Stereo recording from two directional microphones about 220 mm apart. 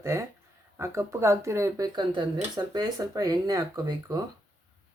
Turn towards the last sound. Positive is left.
turn(degrees=-15)  # may be behind; listen again after turning